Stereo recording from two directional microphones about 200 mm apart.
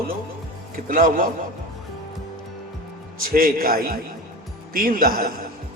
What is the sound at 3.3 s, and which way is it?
A man's voice, 45° right (ahead or behind).